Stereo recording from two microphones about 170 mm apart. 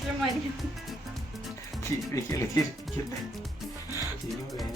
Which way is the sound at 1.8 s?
15° left (ahead or behind).